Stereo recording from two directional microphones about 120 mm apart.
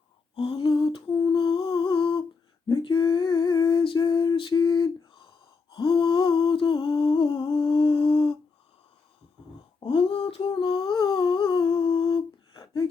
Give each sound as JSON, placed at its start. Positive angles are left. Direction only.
{"t": 0.3, "sound": "lullaby", "side_deg": 50}
{"t": 1.2, "sound": "humming", "side_deg": 40}
{"t": 2.6, "sound": "a sound", "side_deg": 40}
{"t": 9.9, "sound": "humming", "side_deg": 50}